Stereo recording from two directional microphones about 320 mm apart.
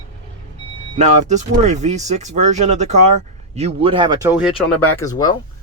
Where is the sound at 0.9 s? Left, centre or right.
Right; by 4.6 s centre.